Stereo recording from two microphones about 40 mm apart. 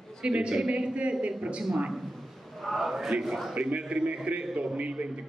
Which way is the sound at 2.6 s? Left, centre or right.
Centre.